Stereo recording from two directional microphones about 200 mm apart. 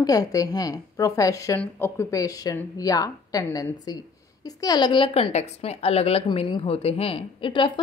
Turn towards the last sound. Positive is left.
turn(degrees=25)  # may be behind; listen again after turning